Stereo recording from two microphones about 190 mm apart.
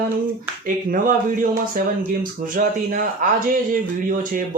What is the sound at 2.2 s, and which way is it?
Speech, 45° right (ahead or behind).